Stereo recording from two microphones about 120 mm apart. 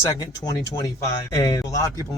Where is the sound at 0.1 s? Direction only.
30° left (ahead or behind).